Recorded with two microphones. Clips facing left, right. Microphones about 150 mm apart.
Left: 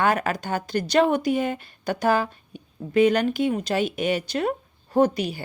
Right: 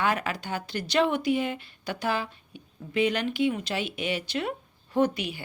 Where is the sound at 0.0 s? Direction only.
45° left (ahead or behind).